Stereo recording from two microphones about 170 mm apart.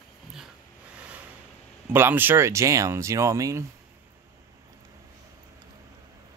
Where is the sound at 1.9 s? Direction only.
10° right (ahead or behind).